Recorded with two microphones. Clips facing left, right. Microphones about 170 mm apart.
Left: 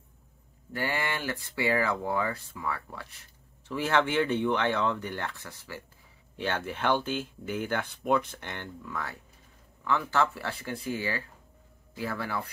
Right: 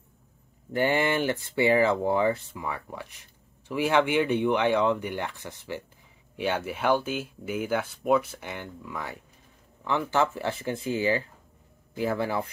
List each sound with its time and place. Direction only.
0.7 s speech: 25° right (ahead or behind)